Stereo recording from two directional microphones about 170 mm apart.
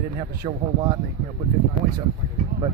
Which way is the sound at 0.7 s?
25° right (ahead or behind).